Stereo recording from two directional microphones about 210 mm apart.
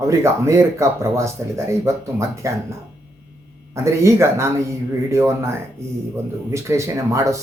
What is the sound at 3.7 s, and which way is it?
Speech, 15° right (ahead or behind).